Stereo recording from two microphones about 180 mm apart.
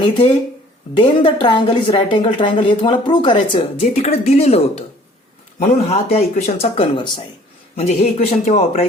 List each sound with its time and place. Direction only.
0.0 s a woman's voice: 25° left (ahead or behind)